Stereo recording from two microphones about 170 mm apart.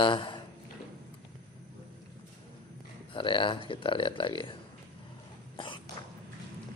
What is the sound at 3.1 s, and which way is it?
Speech, 30° left (ahead or behind).